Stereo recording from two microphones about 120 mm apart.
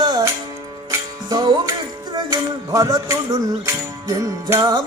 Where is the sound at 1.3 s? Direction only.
35° right (ahead or behind).